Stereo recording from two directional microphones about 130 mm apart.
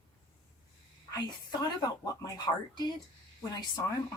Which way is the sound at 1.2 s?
30° left (ahead or behind).